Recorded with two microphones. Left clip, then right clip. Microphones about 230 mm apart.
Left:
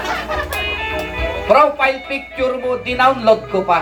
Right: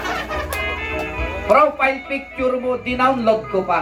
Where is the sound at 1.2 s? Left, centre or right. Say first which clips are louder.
Left 2 dB; left.